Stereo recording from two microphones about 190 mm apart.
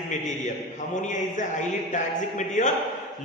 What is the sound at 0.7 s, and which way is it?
Speech, 40° left (ahead or behind).